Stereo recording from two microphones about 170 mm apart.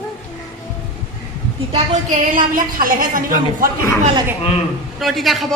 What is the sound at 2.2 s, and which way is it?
A woman's voice, 50° right (ahead or behind).